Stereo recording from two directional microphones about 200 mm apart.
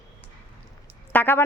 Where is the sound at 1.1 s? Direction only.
10° left (ahead or behind).